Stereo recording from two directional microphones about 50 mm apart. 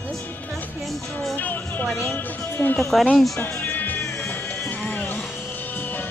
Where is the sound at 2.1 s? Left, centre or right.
Left.